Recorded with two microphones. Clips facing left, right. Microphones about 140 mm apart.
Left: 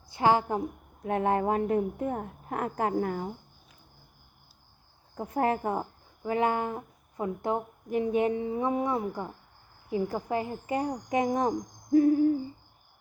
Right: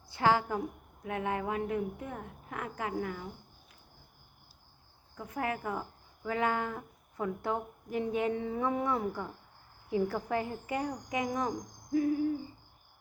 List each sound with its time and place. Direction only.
0.1 s a woman's voice: 20° left (ahead or behind)
1.0 s a woman's voice: 35° left (ahead or behind)
5.1 s speech: 40° left (ahead or behind)
6.3 s a woman's voice: 20° left (ahead or behind); by 12.3 s 40° left (ahead or behind)